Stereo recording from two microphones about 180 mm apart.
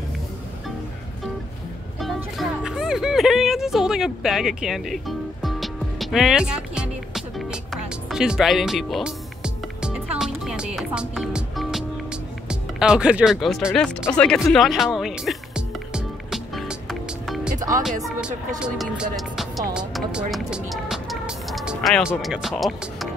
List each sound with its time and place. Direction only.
2.0 s music: centre (ahead or behind)
17.6 s music: 20° right (ahead or behind)
17.8 s speech: centre (ahead or behind)